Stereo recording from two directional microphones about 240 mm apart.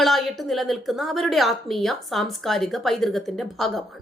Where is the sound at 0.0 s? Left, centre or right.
Centre.